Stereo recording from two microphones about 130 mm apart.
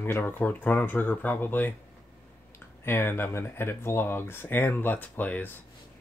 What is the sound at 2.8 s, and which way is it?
Speech, 15° left (ahead or behind).